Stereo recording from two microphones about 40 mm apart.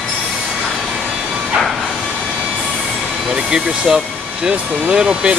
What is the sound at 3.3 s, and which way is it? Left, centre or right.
Speech, centre.